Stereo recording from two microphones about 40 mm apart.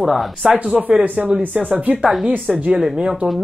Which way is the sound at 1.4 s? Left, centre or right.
Right.